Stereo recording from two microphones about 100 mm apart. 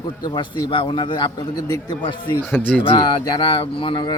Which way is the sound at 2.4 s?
20° left (ahead or behind).